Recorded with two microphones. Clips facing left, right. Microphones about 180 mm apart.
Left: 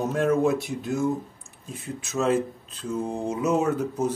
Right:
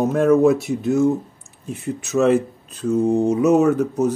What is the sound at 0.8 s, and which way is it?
Speech, 70° right (ahead or behind).